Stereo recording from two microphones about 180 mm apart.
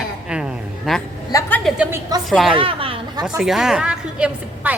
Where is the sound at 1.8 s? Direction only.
15° right (ahead or behind).